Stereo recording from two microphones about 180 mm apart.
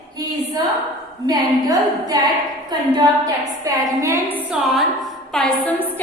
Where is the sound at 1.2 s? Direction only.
20° right (ahead or behind); by 5.8 s 5° left (ahead or behind).